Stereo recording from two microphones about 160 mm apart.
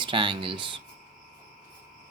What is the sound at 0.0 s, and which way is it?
Speech, 30° right (ahead or behind).